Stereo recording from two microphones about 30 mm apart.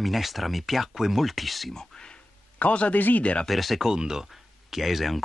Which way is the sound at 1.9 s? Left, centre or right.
Centre.